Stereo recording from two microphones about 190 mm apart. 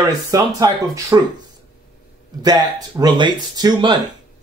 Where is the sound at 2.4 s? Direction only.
20° right (ahead or behind).